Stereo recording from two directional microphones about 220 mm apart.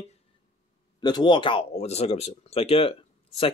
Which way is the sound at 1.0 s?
20° left (ahead or behind).